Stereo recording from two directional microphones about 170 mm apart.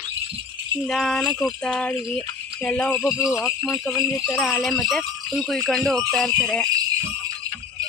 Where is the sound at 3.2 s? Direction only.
Centre (ahead or behind).